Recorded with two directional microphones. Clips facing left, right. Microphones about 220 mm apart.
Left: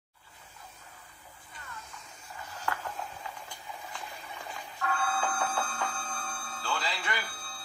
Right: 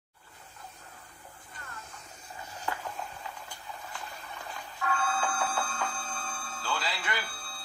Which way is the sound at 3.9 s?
10° left (ahead or behind).